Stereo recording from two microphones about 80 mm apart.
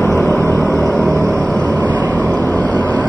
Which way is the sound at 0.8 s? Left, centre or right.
Right.